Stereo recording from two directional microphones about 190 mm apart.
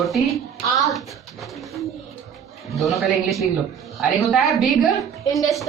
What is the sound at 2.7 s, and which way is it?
A woman's voice, centre (ahead or behind).